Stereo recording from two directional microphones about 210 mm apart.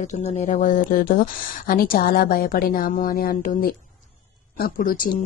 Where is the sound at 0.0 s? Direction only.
35° left (ahead or behind).